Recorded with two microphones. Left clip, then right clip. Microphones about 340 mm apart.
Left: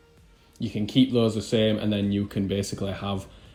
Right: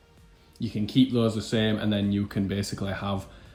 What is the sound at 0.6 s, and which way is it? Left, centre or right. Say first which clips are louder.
Speech: left 1 dB; centre.